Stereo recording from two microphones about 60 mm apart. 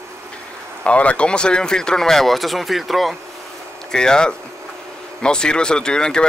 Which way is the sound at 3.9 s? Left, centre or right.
Centre.